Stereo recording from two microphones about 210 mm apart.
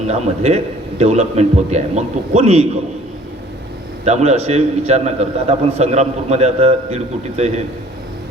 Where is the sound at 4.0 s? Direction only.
30° right (ahead or behind).